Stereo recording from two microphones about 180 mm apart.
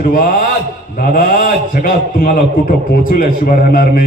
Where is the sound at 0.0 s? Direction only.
50° left (ahead or behind).